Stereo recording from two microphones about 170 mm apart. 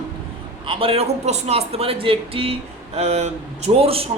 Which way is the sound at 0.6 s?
30° right (ahead or behind).